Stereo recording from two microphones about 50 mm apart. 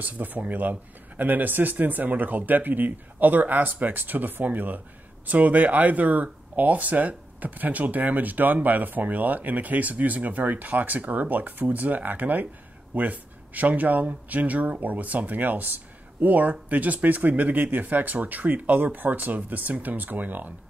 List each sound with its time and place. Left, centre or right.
0.0 s speech: right